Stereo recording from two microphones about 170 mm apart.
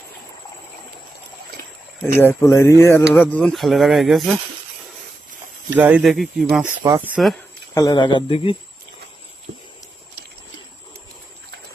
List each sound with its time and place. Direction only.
2.1 s speech: 15° left (ahead or behind)
3.2 s speech: 5° left (ahead or behind)
5.7 s speech: 10° right (ahead or behind)
6.8 s speech: 15° right (ahead or behind)
7.7 s speech: 20° left (ahead or behind)